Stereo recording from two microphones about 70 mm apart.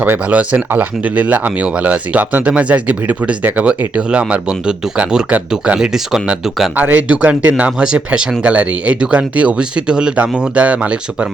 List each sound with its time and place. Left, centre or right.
0.0 s speech: right; by 6.7 s centre
6.7 s speech: right